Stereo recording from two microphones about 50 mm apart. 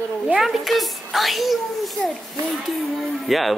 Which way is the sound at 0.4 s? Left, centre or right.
Centre.